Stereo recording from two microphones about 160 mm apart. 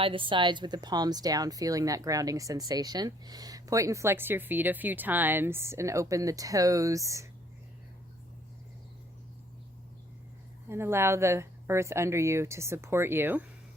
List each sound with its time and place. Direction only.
0.0 s speech: 30° right (ahead or behind)
10.7 s speech: 15° right (ahead or behind)